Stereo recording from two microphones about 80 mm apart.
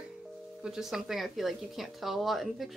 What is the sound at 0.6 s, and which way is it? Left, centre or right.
Speech, centre.